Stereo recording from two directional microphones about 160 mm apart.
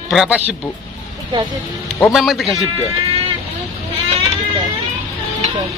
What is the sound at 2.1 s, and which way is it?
Speech, centre (ahead or behind).